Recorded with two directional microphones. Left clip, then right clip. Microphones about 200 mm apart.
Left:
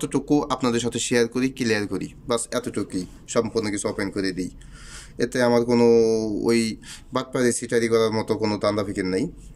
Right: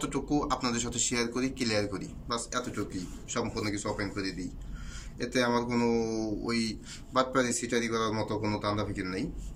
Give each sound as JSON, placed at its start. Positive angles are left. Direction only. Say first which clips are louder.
{"t": 0.0, "sound": "speech", "louder": "left 8 dB", "side_deg": 35}